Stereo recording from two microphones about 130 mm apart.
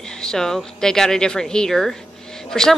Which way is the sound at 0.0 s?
5° left (ahead or behind).